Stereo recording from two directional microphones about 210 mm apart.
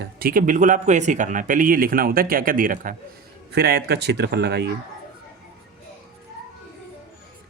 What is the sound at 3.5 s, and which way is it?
Speech, 50° right (ahead or behind).